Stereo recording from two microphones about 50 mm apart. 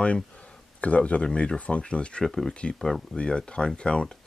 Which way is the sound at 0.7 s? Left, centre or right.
Left.